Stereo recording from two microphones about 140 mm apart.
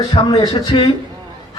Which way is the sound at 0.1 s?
30° left (ahead or behind).